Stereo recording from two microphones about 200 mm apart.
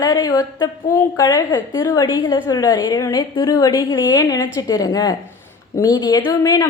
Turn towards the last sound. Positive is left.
turn(degrees=20)  # may be behind; listen again after turning